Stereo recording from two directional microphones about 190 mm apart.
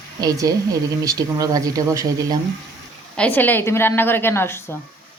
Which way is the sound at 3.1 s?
5° left (ahead or behind).